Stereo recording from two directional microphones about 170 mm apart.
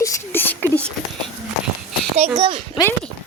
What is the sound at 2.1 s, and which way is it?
Speech, 40° right (ahead or behind).